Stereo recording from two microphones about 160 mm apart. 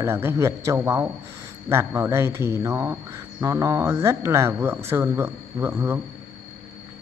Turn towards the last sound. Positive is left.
turn(degrees=-15)  # may be behind; listen again after turning